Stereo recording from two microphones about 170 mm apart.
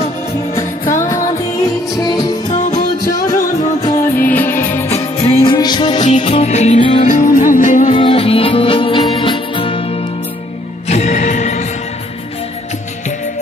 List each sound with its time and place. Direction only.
2.0 s music: 25° left (ahead or behind)
2.5 s music: 45° left (ahead or behind)
3.3 s music: 20° left (ahead or behind)
4.9 s music: 30° left (ahead or behind)
6.0 s music: 40° left (ahead or behind)
7.1 s music: 50° left (ahead or behind)
7.9 s music: 30° left (ahead or behind)